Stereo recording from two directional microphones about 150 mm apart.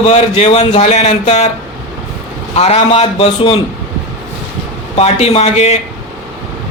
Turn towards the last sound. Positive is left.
turn(degrees=45)  # may be behind; listen again after turning